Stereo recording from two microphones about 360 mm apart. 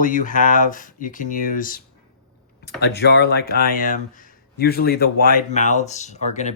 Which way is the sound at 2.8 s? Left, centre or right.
Left.